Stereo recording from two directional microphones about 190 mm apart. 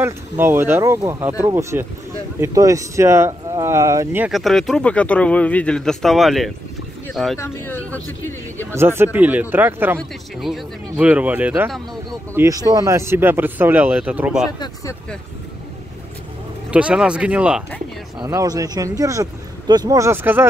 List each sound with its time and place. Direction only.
0.0 s speech: 10° right (ahead or behind)
4.3 s speech: centre (ahead or behind)
7.3 s speech: 10° left (ahead or behind)
8.7 s speech: 10° right (ahead or behind)
16.7 s speech: 5° right (ahead or behind)
18.2 s speech: 20° right (ahead or behind)